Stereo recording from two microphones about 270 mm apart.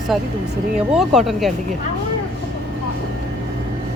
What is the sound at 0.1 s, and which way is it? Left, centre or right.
Speech, centre.